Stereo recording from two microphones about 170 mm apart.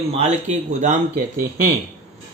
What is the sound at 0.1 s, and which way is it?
Speech, 40° right (ahead or behind).